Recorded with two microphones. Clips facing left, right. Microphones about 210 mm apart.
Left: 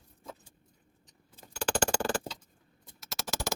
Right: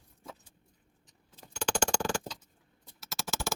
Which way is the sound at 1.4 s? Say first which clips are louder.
Left 1 dB; 5° left (ahead or behind).